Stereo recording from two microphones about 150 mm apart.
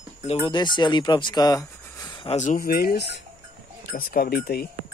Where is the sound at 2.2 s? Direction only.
50° left (ahead or behind).